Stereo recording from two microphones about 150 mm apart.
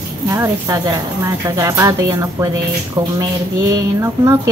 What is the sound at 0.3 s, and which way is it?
A woman's voice, 20° right (ahead or behind).